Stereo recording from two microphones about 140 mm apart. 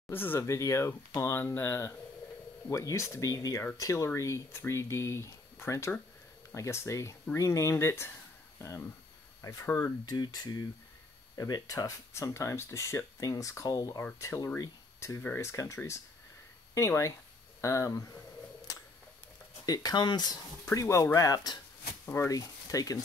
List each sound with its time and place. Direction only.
0.1 s speech: 15° left (ahead or behind)
10.0 s speech: 30° left (ahead or behind)
19.6 s speech: 30° left (ahead or behind)